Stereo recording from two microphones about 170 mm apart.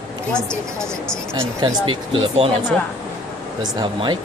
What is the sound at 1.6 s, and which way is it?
Speech, 30° right (ahead or behind).